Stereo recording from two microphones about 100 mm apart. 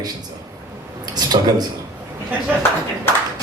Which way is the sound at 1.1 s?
45° right (ahead or behind).